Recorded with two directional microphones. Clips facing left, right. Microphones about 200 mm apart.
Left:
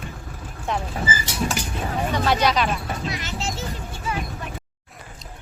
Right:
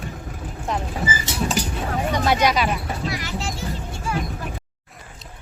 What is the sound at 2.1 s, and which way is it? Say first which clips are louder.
Speech: right 1 dB; 10° right (ahead or behind).